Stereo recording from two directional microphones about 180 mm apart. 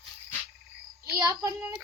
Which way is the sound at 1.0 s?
20° right (ahead or behind).